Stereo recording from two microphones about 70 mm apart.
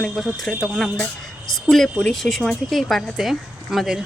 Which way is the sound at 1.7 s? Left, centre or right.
Centre.